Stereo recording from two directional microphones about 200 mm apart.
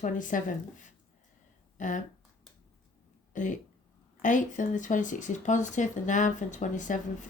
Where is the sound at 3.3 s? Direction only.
40° left (ahead or behind).